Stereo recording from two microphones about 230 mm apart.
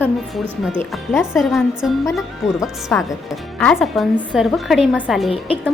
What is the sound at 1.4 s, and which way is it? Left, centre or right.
Speech, centre.